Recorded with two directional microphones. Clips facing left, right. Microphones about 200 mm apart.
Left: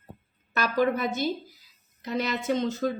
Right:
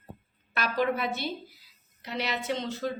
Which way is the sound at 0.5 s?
45° left (ahead or behind).